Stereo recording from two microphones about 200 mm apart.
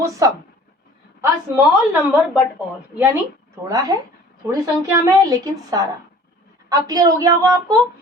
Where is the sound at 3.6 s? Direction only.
20° right (ahead or behind).